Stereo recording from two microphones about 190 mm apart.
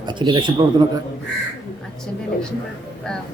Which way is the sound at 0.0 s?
25° right (ahead or behind).